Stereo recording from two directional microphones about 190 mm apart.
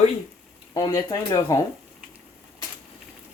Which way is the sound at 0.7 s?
20° left (ahead or behind).